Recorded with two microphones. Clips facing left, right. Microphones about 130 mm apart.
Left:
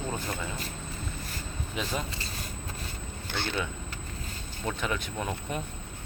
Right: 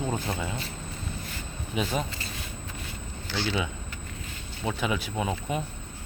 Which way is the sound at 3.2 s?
55° left (ahead or behind).